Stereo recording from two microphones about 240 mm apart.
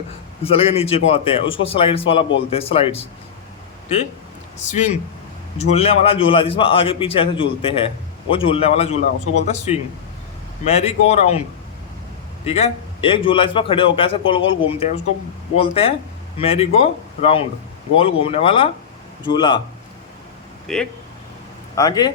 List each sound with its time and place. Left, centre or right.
0.4 s a man's voice: left
5.5 s a man's voice: left
12.5 s a man's voice: left
20.7 s speech: centre
21.8 s speech: centre